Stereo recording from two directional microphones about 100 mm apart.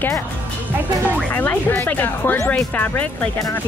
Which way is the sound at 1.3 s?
20° left (ahead or behind).